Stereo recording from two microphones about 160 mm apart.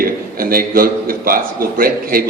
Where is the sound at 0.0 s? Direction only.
65° right (ahead or behind).